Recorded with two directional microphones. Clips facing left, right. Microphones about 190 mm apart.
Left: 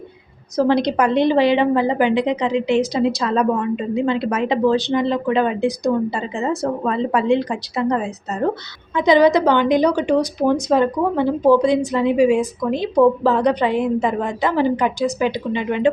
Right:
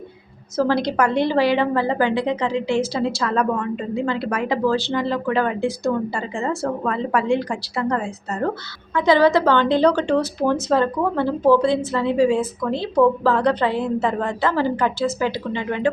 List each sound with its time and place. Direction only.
0.5 s a woman's voice: 20° left (ahead or behind)